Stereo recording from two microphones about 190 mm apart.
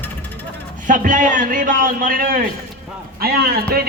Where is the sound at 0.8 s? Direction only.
45° right (ahead or behind).